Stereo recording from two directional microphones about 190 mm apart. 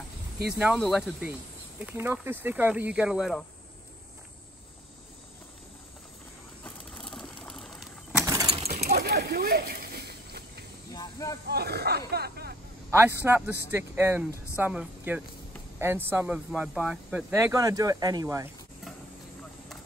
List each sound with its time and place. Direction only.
0.6 s speech: centre (ahead or behind)
6.6 s a sound: 5° left (ahead or behind)
8.3 s bird: 20° right (ahead or behind)
8.7 s a sound: 55° right (ahead or behind)
10.9 s snake: 20° left (ahead or behind)
11.4 s snake: 60° right (ahead or behind)
12.1 s vehicle: 55° right (ahead or behind)
12.9 s speech: 10° right (ahead or behind)